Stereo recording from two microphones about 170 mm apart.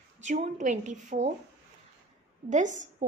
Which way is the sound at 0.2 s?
45° right (ahead or behind).